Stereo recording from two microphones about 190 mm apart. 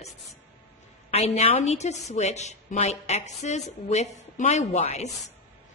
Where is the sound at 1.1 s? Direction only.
35° left (ahead or behind).